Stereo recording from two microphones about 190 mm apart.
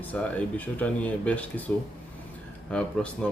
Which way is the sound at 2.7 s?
5° left (ahead or behind).